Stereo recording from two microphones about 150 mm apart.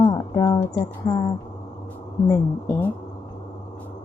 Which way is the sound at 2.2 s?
20° left (ahead or behind).